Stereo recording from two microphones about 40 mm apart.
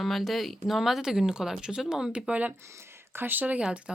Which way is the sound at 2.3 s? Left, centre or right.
Right.